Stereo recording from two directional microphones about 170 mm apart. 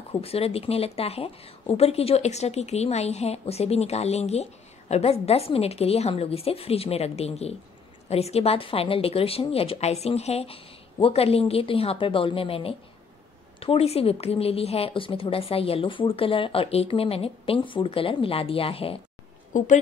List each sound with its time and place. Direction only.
0.1 s a woman's voice: 35° left (ahead or behind)